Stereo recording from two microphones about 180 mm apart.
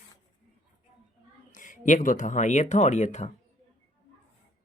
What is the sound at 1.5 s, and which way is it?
Speech, 45° left (ahead or behind).